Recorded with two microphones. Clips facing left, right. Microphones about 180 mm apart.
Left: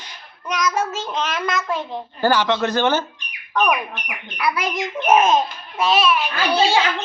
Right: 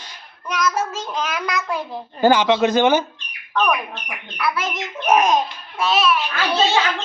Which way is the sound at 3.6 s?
15° left (ahead or behind).